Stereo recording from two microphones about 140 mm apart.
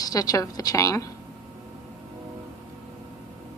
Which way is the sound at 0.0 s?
25° left (ahead or behind).